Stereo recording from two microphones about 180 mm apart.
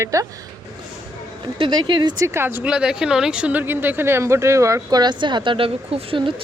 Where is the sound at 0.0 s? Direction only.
15° right (ahead or behind).